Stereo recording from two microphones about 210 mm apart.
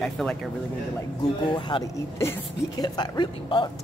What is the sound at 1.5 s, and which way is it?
Speech, 20° left (ahead or behind).